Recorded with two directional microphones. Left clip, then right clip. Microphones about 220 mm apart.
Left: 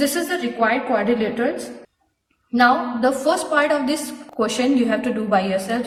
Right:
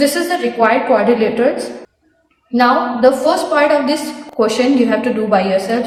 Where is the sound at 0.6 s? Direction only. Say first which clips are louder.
Right 7 dB; 15° left (ahead or behind).